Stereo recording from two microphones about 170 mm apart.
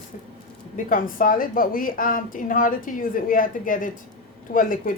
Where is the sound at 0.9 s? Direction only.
55° left (ahead or behind).